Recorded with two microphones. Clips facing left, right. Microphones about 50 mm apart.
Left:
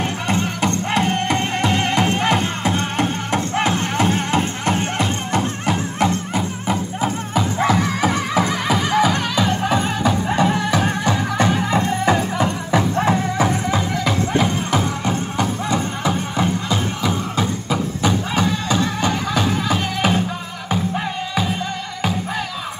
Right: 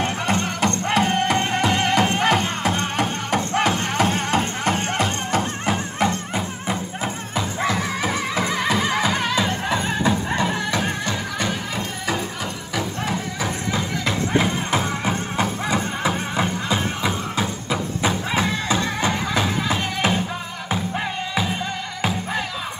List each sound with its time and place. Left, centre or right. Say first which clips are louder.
0.0 s music: left 1 dB; centre
11.5 s music: left 8 dB; left
12.7 s music: left 8 dB; left
14.3 s music: even; centre